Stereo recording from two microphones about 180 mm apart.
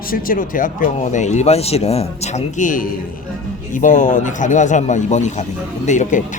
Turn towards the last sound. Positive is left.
turn(degrees=45)  # may be behind; listen again after turning